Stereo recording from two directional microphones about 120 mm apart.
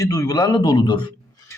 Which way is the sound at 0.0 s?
30° left (ahead or behind).